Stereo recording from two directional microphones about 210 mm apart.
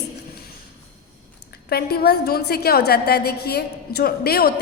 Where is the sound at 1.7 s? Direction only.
45° left (ahead or behind).